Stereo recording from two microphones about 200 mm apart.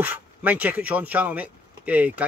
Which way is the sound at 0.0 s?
10° right (ahead or behind).